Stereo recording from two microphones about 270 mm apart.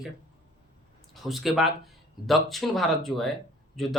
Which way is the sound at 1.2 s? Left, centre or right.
Centre.